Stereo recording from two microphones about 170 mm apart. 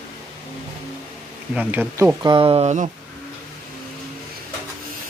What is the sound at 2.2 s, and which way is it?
Speech, 30° right (ahead or behind).